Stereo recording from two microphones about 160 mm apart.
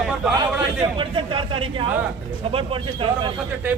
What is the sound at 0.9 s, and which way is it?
A man's voice, 30° right (ahead or behind).